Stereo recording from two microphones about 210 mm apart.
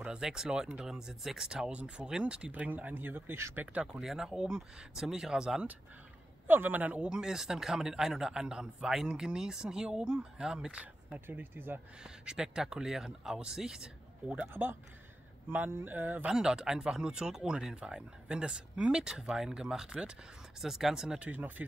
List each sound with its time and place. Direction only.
0.0 s speech: 5° right (ahead or behind)